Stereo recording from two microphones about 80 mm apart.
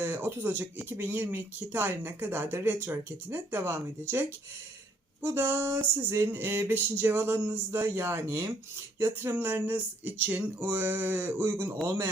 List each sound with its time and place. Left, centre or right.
0.0 s speech: right